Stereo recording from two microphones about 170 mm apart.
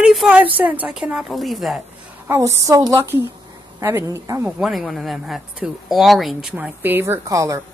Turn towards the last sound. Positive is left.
turn(degrees=-20)  # may be behind; listen again after turning